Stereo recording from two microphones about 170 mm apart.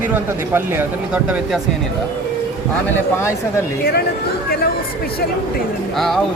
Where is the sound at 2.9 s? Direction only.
15° left (ahead or behind).